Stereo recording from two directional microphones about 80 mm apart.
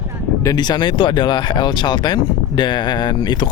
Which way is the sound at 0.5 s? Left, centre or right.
Left.